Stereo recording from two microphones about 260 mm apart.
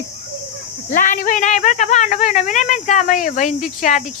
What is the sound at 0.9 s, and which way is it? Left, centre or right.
Speech, left.